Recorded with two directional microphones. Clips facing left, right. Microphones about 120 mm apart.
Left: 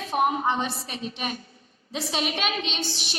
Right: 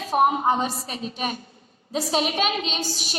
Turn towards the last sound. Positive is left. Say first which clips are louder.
# right 2 dB
turn(degrees=-40)  # may be behind; listen again after turning